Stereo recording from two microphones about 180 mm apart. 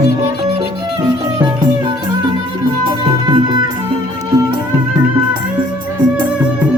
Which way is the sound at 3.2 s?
25° right (ahead or behind).